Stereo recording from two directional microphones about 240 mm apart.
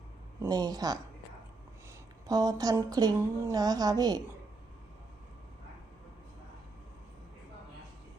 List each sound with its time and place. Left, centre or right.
0.4 s a woman's voice: centre
2.2 s a woman's voice: centre